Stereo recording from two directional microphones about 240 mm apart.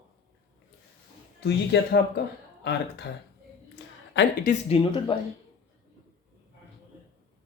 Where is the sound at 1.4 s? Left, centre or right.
Left.